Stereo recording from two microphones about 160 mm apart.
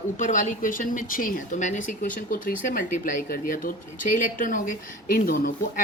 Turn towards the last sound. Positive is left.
turn(degrees=60)  # may be behind; listen again after turning